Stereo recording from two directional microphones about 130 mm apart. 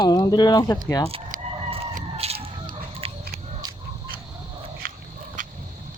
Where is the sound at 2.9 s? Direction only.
45° right (ahead or behind).